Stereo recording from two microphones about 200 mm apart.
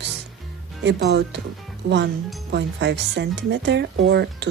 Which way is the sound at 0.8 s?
55° right (ahead or behind).